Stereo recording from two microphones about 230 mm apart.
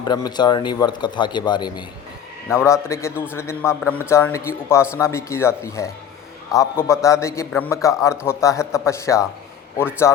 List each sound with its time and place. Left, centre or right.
0.0 s a man's voice: centre